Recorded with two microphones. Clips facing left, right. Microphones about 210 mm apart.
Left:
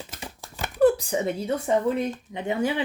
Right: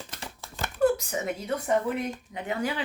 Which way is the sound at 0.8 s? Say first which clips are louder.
Left 5 dB; 30° left (ahead or behind).